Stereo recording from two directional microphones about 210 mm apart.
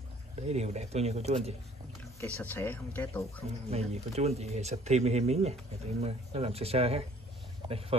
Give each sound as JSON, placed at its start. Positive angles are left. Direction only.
{"t": 0.4, "sound": "speech", "side_deg": -30}
{"t": 2.1, "sound": "speech", "side_deg": 10}
{"t": 3.7, "sound": "speech", "side_deg": -30}